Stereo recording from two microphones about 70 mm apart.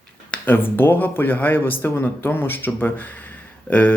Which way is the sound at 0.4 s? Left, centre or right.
Left.